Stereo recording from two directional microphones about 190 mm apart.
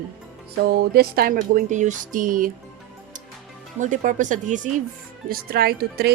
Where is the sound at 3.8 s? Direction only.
40° right (ahead or behind).